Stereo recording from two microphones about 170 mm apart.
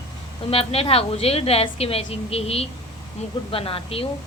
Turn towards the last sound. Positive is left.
turn(degrees=35)  # may be behind; listen again after turning